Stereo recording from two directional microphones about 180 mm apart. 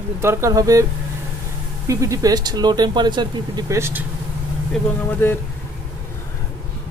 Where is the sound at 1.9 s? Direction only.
15° right (ahead or behind).